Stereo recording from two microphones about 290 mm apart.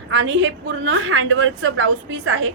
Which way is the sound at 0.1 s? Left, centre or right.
Right.